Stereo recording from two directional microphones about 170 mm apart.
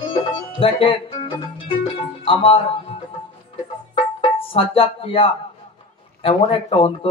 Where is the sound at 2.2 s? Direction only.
30° left (ahead or behind).